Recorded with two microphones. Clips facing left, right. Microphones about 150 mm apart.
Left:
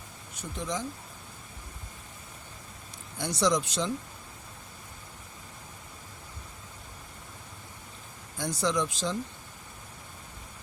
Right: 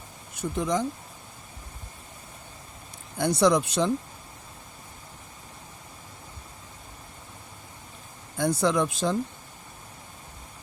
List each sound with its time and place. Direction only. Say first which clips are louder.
0.3 s speech: right 8 dB; 55° right (ahead or behind)
3.2 s speech: right 6 dB; 55° right (ahead or behind)
8.4 s speech: right 5 dB; 55° right (ahead or behind)